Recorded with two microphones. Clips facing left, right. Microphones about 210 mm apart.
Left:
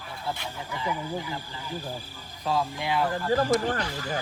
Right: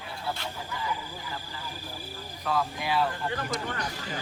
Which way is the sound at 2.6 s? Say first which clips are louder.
Even; 20° left (ahead or behind).